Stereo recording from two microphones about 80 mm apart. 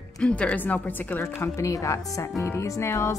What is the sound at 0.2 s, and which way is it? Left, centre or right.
A woman's voice, centre.